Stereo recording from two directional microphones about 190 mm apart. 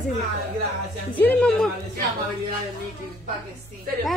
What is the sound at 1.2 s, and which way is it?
Speech, 5° left (ahead or behind).